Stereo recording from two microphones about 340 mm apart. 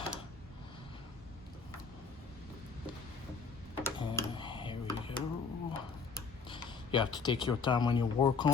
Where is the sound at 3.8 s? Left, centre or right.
Centre.